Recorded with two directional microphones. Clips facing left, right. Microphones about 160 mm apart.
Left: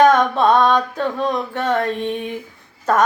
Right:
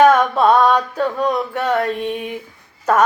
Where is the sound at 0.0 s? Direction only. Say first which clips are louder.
Right 1 dB; 10° right (ahead or behind).